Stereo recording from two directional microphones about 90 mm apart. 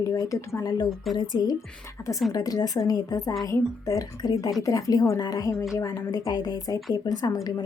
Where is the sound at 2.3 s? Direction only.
45° left (ahead or behind).